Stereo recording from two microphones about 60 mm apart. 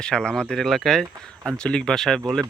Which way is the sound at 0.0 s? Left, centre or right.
Centre.